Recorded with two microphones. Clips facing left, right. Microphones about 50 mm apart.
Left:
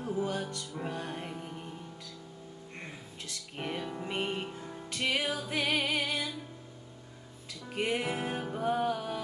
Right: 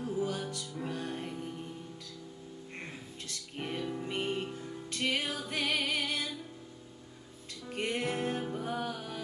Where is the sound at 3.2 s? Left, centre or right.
Centre.